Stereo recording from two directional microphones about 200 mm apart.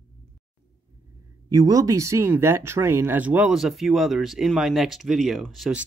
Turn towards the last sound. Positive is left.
turn(degrees=-5)  # may be behind; listen again after turning